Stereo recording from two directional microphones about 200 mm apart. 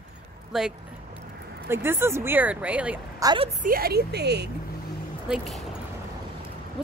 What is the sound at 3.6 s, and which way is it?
Speech, 50° right (ahead or behind).